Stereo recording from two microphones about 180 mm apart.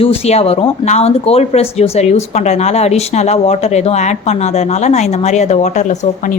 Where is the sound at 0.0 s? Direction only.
35° left (ahead or behind).